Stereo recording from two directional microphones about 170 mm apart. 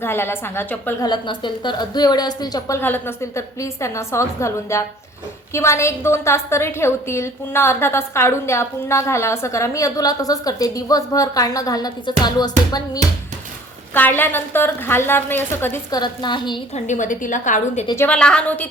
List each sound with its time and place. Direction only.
0.0 s a woman's voice: 15° left (ahead or behind)
1.0 s a woman's voice: 25° left (ahead or behind)
13.9 s a woman's voice: 10° left (ahead or behind); by 16.6 s 25° left (ahead or behind)
16.7 s a woman's voice: 45° left (ahead or behind)
17.9 s a woman's voice: 10° left (ahead or behind)